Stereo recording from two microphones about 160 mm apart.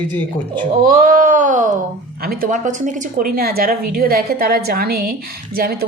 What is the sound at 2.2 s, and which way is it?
A woman's voice, 65° right (ahead or behind).